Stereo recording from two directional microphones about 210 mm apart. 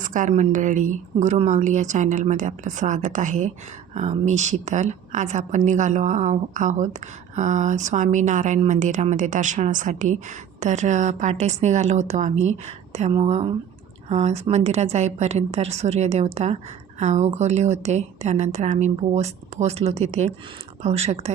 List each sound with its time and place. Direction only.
0.0 s a woman's voice: 40° right (ahead or behind)